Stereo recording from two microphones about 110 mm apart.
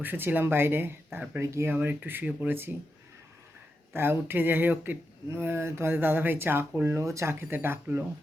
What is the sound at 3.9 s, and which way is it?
Speech, 20° right (ahead or behind).